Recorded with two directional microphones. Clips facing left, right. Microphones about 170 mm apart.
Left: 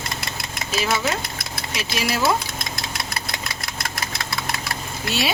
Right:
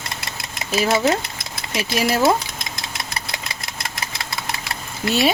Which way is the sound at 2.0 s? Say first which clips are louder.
Right 5 dB; 45° right (ahead or behind).